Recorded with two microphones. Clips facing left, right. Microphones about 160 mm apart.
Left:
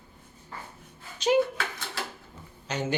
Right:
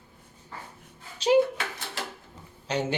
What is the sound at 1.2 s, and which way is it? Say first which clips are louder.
Speech: right 2 dB; 30° right (ahead or behind).